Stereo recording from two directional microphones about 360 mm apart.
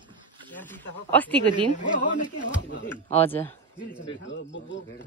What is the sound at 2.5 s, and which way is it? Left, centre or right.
Speech, left.